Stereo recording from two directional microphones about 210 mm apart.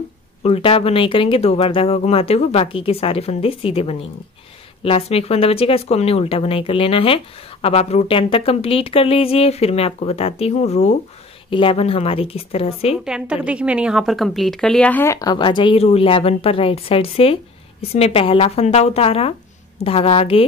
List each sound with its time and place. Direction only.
0.4 s speech: 25° left (ahead or behind)
13.0 s a woman's voice: 5° right (ahead or behind); by 20.4 s 30° left (ahead or behind)